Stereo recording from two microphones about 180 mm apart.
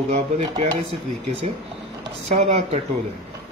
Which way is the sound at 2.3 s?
40° right (ahead or behind).